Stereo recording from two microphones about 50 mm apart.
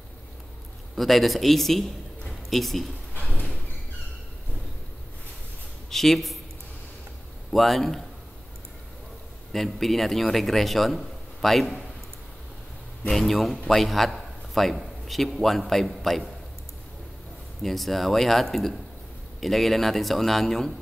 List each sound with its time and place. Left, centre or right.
0.9 s a man's voice: centre
3.2 s a sound: left
5.9 s speech: centre
7.5 s a man's voice: centre
9.5 s a man's voice: centre
13.1 s a man's voice: centre
17.6 s a man's voice: centre